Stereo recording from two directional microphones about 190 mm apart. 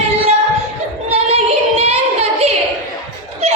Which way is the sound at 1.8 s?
30° right (ahead or behind).